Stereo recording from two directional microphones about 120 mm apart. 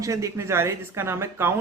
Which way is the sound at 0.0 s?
25° right (ahead or behind).